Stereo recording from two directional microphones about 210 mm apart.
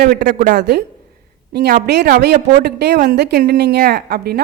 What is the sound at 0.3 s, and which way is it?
Speech, 35° right (ahead or behind).